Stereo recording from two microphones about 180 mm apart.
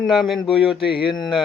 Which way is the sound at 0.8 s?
30° left (ahead or behind).